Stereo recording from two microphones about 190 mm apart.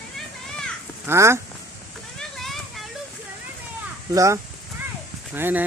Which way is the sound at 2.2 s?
Centre (ahead or behind).